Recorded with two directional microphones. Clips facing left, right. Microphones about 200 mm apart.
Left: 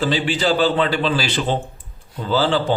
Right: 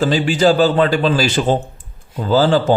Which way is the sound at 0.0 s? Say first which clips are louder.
Right 6 dB; 45° right (ahead or behind).